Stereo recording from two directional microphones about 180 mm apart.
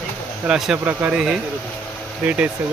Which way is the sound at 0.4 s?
5° right (ahead or behind).